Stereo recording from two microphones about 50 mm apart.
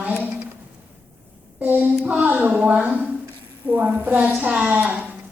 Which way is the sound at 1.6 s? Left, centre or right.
Right.